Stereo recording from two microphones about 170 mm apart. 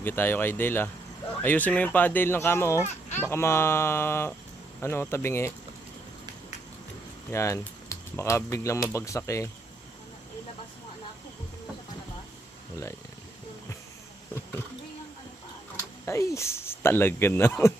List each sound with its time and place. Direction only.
0.0 s speech: 10° left (ahead or behind)
7.3 s speech: 15° left (ahead or behind)
16.0 s speech: 15° left (ahead or behind)